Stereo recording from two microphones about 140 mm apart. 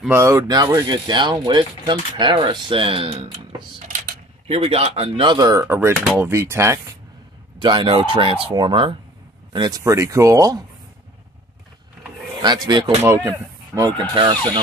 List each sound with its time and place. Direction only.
0.1 s speech: 20° right (ahead or behind)
7.6 s speech: 35° right (ahead or behind)
12.6 s speech: 30° right (ahead or behind)
13.0 s speech: 15° right (ahead or behind)
13.9 s speech: 35° right (ahead or behind)